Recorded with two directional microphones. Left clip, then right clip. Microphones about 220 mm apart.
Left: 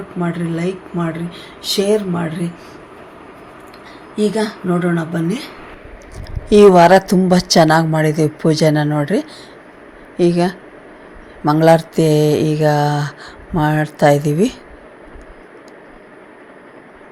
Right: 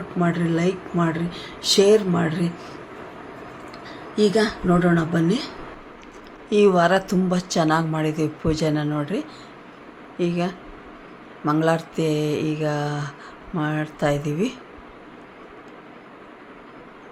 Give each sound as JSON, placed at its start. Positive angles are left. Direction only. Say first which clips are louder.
{"t": 0.2, "sound": "speech", "louder": "even", "side_deg": 0}
{"t": 4.1, "sound": "speech", "louder": "left 1 dB", "side_deg": 0}
{"t": 6.5, "sound": "a woman's voice", "louder": "left 10 dB", "side_deg": 30}